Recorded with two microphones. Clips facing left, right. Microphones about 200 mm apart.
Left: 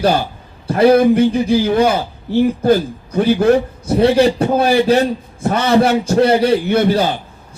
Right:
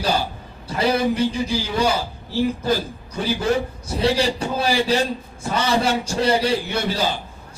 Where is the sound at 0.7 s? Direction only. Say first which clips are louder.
Left 10 dB; 55° left (ahead or behind).